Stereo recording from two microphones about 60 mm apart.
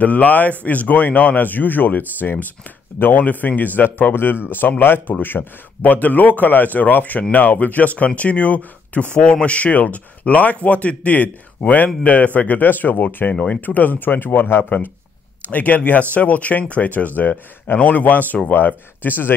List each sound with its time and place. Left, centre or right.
0.0 s speech: left